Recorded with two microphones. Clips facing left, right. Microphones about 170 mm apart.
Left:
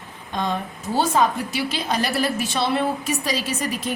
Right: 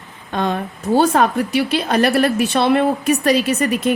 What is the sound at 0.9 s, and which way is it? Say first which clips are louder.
A woman's voice: right 5 dB; 65° right (ahead or behind).